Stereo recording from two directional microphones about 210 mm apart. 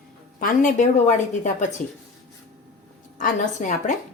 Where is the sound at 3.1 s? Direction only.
35° left (ahead or behind).